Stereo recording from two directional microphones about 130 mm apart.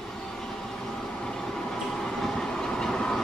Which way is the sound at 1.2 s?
5° left (ahead or behind).